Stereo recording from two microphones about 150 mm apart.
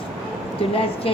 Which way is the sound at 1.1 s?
40° left (ahead or behind).